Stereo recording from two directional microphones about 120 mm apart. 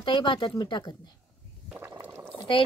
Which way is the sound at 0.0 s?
40° left (ahead or behind).